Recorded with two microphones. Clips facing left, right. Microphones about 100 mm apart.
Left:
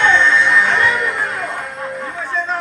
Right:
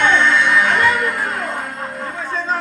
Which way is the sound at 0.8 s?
50° right (ahead or behind).